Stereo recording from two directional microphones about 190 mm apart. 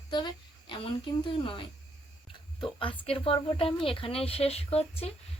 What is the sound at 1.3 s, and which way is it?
A woman's voice, 25° left (ahead or behind).